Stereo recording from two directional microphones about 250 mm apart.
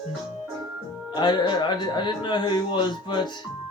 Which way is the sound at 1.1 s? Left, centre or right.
Centre.